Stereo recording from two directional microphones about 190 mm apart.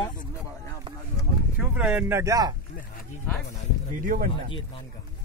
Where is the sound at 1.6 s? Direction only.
5° right (ahead or behind).